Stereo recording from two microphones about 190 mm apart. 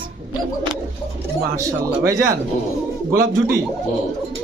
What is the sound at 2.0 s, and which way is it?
Speech, 15° right (ahead or behind).